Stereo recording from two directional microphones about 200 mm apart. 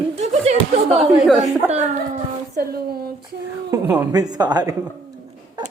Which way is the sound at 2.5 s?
50° right (ahead or behind).